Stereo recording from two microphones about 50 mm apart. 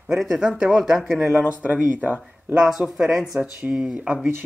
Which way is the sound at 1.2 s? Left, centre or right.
Right.